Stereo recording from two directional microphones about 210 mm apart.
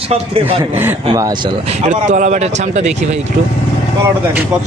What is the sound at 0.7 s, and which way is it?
A man's voice, 10° right (ahead or behind).